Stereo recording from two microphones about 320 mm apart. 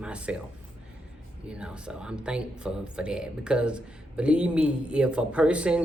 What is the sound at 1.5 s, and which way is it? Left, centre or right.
Speech, centre.